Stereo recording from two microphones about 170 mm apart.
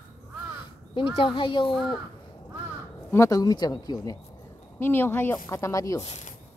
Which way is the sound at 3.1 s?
20° left (ahead or behind).